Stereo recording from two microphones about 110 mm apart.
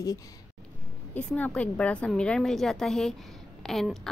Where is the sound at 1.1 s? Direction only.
15° left (ahead or behind).